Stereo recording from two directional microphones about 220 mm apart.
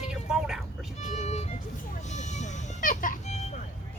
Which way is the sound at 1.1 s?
30° left (ahead or behind).